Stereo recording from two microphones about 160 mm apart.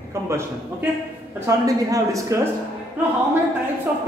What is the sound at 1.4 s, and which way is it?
Speech, 20° right (ahead or behind).